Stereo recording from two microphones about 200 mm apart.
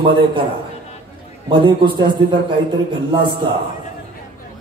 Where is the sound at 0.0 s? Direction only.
25° right (ahead or behind).